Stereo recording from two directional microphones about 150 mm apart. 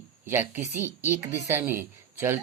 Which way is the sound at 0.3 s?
15° right (ahead or behind).